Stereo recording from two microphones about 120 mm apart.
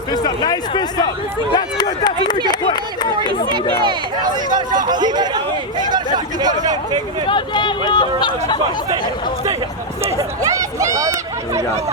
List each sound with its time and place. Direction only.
0.1 s a sound: 35° left (ahead or behind)
3.8 s speech: 35° right (ahead or behind)
7.3 s speech: 40° left (ahead or behind)
10.0 s speech: 25° right (ahead or behind)